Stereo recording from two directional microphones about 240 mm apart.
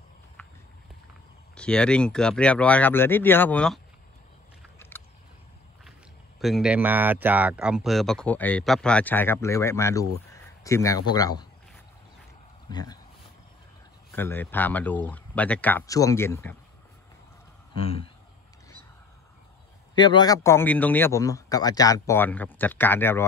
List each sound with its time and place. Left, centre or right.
1.6 s speech: centre
4.7 s boat: centre
6.4 s speech: centre
12.6 s speech: centre
14.1 s a man's voice: centre
17.7 s speech: left
20.0 s a man's voice: centre